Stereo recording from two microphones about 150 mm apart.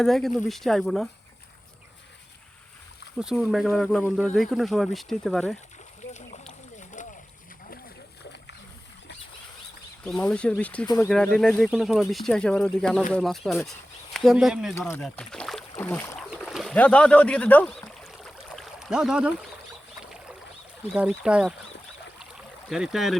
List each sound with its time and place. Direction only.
0.0 s speech: centre (ahead or behind)
3.2 s speech: centre (ahead or behind)
6.1 s boat: 50° left (ahead or behind)
10.0 s speech: 10° left (ahead or behind)
10.8 s speech: 20° left (ahead or behind)
11.3 s speech: 5° left (ahead or behind)
14.8 s speech: 15° left (ahead or behind)
15.0 s speech: 5° left (ahead or behind)
16.3 s bird: centre (ahead or behind)
16.7 s a sound: 10° left (ahead or behind)
20.9 s speech: centre (ahead or behind)
22.7 s speech: centre (ahead or behind)